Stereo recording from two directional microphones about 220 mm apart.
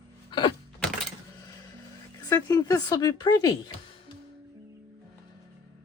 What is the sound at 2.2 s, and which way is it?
Speech, 15° left (ahead or behind).